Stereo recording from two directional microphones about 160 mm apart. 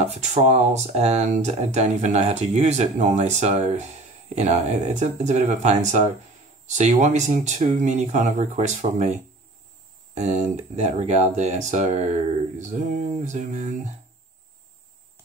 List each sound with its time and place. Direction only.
0.0 s speech: 45° right (ahead or behind)